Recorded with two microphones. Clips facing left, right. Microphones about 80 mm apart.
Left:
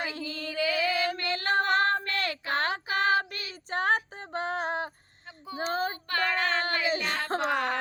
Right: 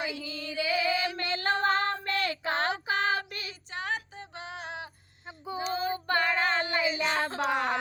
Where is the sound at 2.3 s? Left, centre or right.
Right.